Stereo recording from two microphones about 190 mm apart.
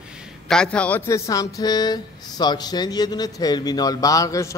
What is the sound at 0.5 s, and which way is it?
Speech, 5° left (ahead or behind).